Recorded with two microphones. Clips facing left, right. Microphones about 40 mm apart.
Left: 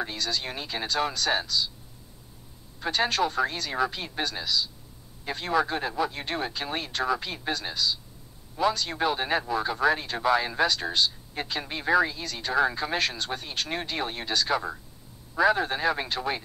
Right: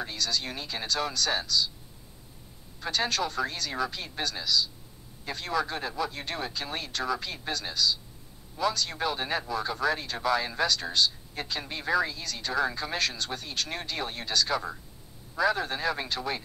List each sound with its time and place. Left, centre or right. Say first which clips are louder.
0.0 s a man's voice: left 1 dB; centre
2.8 s a man's voice: left 4 dB; centre